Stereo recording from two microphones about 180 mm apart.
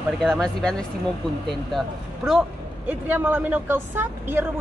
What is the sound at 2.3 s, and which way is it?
Speech, 5° right (ahead or behind).